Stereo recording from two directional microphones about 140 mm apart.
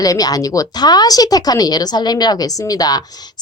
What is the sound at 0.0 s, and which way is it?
Speech, 25° left (ahead or behind).